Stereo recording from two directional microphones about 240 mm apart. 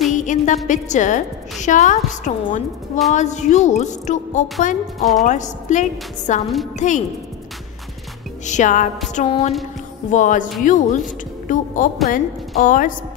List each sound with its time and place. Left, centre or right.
0.1 s music: left
0.7 s a woman's voice: left
4.9 s a woman's voice: centre
5.2 s a woman's voice: left
8.5 s a woman's voice: left